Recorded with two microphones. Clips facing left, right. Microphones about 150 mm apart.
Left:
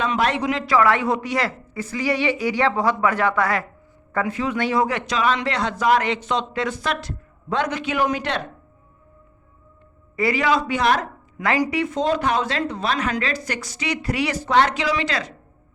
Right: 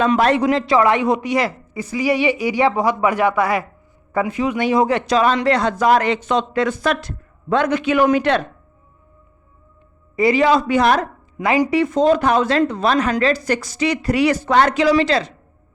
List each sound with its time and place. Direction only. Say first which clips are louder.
0.0 s speech: right 6 dB; 40° right (ahead or behind)
0.6 s a woman's voice: right 3 dB; 25° right (ahead or behind)
4.9 s a woman's voice: right 5 dB; 35° right (ahead or behind); by 8.4 s 55° right (ahead or behind)
10.2 s a man's voice: right 6 dB; 25° right (ahead or behind)
10.6 s a woman's voice: right 5 dB; 45° right (ahead or behind)
11.3 s a man's voice: right 4 dB; 20° right (ahead or behind)
11.8 s a woman's voice: right 6 dB; 45° right (ahead or behind)